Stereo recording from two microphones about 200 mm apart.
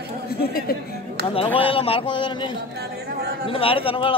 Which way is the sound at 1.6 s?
30° left (ahead or behind).